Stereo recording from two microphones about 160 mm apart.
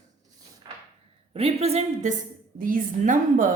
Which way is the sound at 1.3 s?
40° right (ahead or behind).